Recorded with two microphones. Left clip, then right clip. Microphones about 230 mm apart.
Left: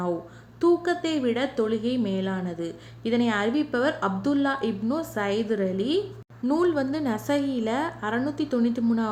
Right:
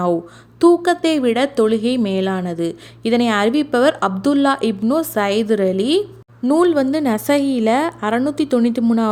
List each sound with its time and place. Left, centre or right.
0.6 s a woman's voice: right
6.4 s a woman's voice: right